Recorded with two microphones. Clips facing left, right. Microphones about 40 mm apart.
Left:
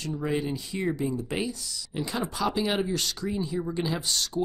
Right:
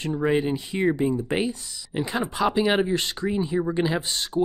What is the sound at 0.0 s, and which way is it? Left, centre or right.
Speech, right.